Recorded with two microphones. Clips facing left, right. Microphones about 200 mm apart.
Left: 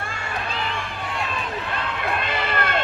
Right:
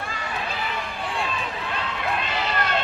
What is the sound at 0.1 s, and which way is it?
Run, 50° left (ahead or behind).